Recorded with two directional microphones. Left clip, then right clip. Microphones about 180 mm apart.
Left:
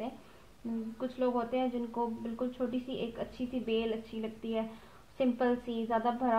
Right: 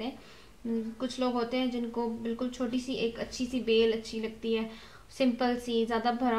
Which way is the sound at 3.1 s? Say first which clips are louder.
Right 3 dB; 35° left (ahead or behind).